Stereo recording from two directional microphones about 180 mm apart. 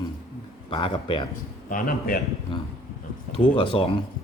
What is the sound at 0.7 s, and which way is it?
Speech, 30° left (ahead or behind).